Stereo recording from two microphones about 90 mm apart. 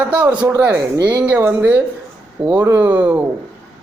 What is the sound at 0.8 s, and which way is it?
Speech, 45° right (ahead or behind).